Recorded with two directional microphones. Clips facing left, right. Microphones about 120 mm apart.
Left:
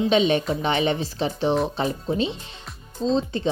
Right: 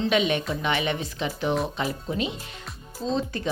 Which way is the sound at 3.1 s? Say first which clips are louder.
Left 2 dB; 25° left (ahead or behind).